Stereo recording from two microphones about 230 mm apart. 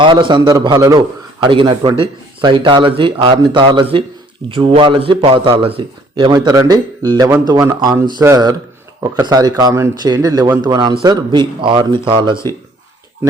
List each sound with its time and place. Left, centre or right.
0.0 s a man's voice: right